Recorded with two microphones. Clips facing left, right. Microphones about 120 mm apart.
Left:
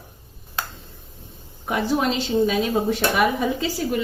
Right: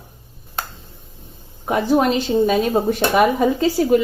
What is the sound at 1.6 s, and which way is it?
A woman's voice, 40° right (ahead or behind).